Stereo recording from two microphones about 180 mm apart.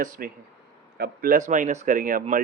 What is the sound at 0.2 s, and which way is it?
Speech, 55° right (ahead or behind).